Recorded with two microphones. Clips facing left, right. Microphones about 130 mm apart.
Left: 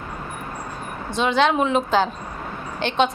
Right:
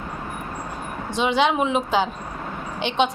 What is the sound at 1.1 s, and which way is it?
A woman's voice, 10° right (ahead or behind).